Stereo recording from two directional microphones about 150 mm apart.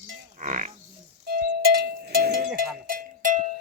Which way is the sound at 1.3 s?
90° right.